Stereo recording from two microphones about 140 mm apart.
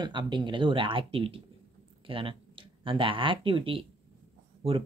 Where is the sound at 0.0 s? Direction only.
35° right (ahead or behind).